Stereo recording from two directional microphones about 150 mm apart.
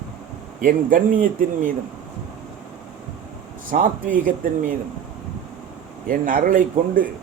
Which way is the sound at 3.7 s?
65° right (ahead or behind).